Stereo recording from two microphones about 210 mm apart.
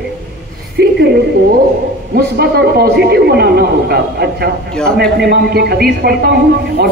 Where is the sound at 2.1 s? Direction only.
50° right (ahead or behind).